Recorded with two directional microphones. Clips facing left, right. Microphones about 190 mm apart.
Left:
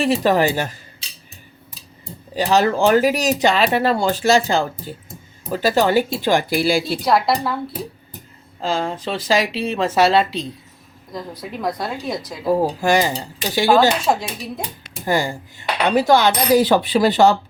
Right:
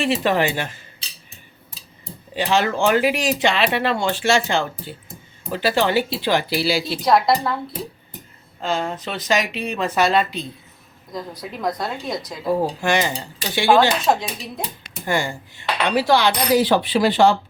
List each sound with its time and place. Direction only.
0.0 s speech: 40° left (ahead or behind)
2.3 s speech: 40° left (ahead or behind)
7.0 s a woman's voice: 5° left (ahead or behind)
8.6 s speech: 30° left (ahead or behind)
11.1 s a woman's voice: centre (ahead or behind)
12.5 s speech: 40° left (ahead or behind)
13.7 s a woman's voice: 5° left (ahead or behind)
15.0 s speech: 40° left (ahead or behind)